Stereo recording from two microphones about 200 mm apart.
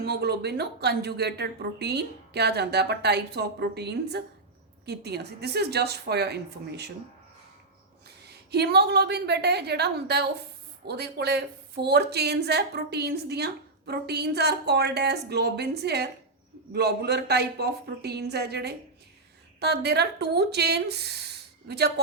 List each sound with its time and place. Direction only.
0.0 s a woman's voice: 55° right (ahead or behind)
8.3 s a woman's voice: 55° right (ahead or behind)